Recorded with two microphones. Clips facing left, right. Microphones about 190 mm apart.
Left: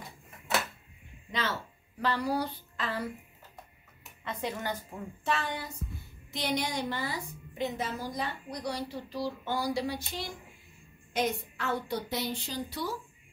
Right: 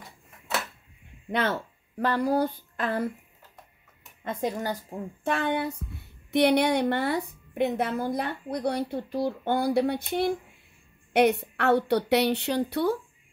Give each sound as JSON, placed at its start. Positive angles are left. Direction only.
{"t": 1.3, "sound": "speech", "side_deg": -55}
{"t": 4.2, "sound": "speech", "side_deg": -45}
{"t": 5.2, "sound": "a woman's voice", "side_deg": -55}